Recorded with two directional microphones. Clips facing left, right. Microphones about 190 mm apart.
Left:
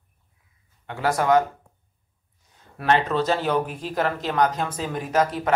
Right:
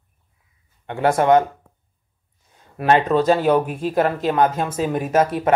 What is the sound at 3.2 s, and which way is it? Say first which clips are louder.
Speech: right 6 dB; 15° right (ahead or behind).